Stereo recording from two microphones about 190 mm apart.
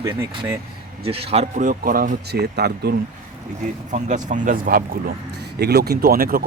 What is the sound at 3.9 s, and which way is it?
Speech, 40° right (ahead or behind).